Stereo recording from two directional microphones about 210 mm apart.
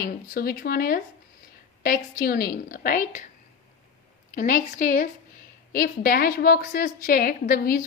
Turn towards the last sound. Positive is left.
turn(degrees=45)  # may be behind; listen again after turning